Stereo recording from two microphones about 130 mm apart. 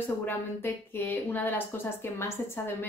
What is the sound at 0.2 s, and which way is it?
A woman's voice, 15° left (ahead or behind).